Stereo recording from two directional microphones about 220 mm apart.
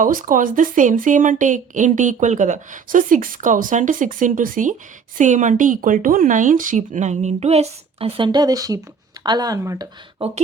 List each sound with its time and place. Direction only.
0.0 s a woman's voice: 40° right (ahead or behind); by 10.2 s 15° right (ahead or behind)